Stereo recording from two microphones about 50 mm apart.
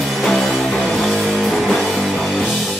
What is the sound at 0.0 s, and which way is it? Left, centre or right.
Music, centre.